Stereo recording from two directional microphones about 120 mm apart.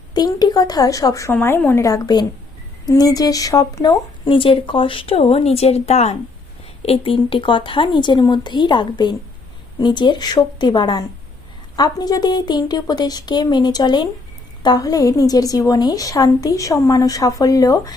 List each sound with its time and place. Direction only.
0.1 s speech: 35° left (ahead or behind)
1.3 s a woman's voice: 15° left (ahead or behind)
4.3 s a woman's voice: 45° left (ahead or behind); by 17.9 s 30° left (ahead or behind)